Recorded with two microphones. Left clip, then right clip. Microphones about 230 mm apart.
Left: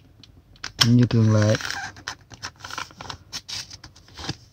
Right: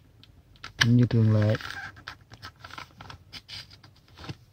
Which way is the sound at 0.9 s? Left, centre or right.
Centre.